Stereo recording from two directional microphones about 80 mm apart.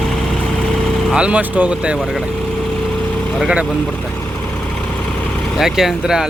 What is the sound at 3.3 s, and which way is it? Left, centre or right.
Speech, centre.